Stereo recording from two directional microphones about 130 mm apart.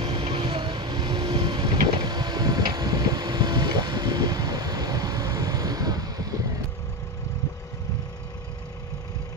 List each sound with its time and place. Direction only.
0.0 s vehicle: 40° right (ahead or behind)